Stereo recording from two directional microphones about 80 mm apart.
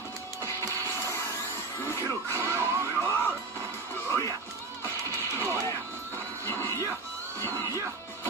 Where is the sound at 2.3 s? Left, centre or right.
Right.